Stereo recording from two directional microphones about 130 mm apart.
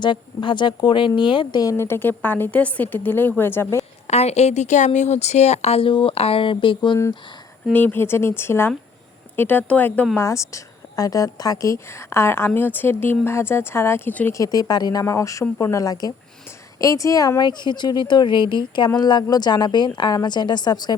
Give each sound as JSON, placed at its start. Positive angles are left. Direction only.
{"t": 0.0, "sound": "speech", "side_deg": 35}
{"t": 1.7, "sound": "speech", "side_deg": 20}
{"t": 4.0, "sound": "a woman's voice", "side_deg": 55}
{"t": 7.7, "sound": "speech", "side_deg": 15}
{"t": 10.2, "sound": "speech", "side_deg": 25}
{"t": 14.3, "sound": "speech", "side_deg": 30}